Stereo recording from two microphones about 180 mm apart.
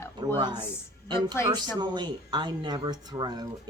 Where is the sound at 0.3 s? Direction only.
25° right (ahead or behind).